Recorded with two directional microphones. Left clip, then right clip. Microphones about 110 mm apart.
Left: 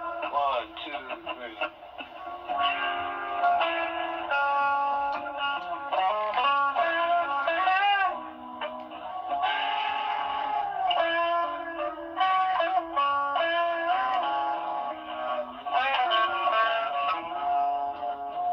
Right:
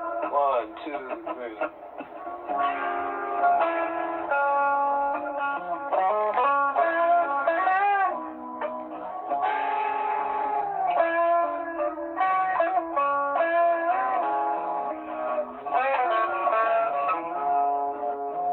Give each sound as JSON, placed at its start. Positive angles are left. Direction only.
{"t": 0.2, "sound": "speech", "side_deg": -40}
{"t": 2.5, "sound": "music", "side_deg": -40}
{"t": 9.3, "sound": "a sound", "side_deg": -40}